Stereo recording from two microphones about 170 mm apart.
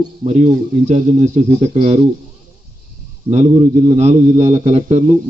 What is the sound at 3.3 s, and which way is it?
A man's voice, 40° right (ahead or behind).